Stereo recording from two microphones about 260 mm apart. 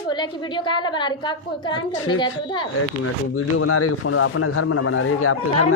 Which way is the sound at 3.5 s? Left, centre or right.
Left.